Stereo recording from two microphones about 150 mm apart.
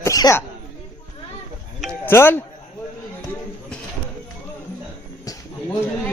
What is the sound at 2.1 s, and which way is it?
Speech, 15° left (ahead or behind).